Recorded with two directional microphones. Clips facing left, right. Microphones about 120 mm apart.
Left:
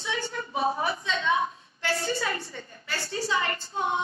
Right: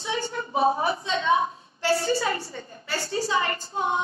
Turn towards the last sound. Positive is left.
turn(degrees=-25)  # may be behind; listen again after turning